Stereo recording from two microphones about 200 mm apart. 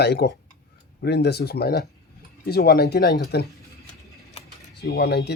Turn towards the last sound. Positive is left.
turn(degrees=55)  # may be behind; listen again after turning